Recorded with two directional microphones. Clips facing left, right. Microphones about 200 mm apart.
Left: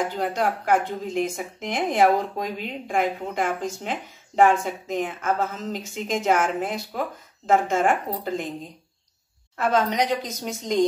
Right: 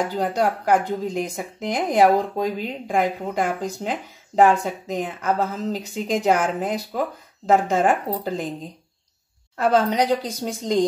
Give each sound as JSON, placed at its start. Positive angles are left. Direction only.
{"t": 0.1, "sound": "a woman's voice", "side_deg": -35}
{"t": 9.6, "sound": "a woman's voice", "side_deg": -30}